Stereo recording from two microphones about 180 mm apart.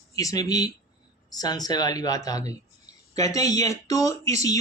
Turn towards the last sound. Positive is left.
turn(degrees=20)  # may be behind; listen again after turning